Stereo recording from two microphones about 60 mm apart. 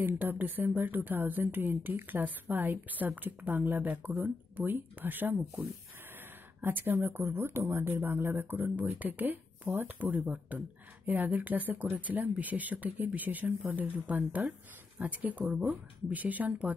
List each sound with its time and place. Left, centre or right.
0.0 s speech: right
6.6 s speech: right